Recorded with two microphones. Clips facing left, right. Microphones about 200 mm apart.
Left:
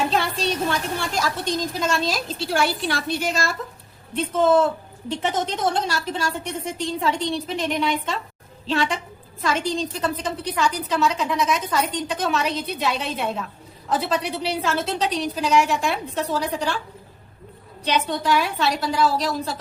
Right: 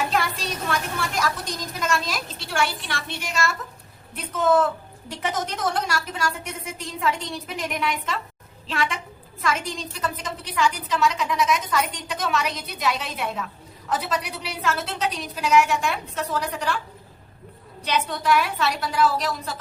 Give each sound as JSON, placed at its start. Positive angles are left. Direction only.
{"t": 0.1, "sound": "a woman's voice", "side_deg": 30}
{"t": 17.8, "sound": "a woman's voice", "side_deg": 30}